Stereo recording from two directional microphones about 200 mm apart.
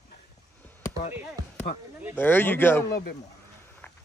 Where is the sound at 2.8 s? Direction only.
50° left (ahead or behind).